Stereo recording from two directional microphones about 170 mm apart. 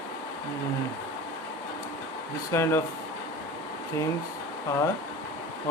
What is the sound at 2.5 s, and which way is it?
Speech, 15° left (ahead or behind).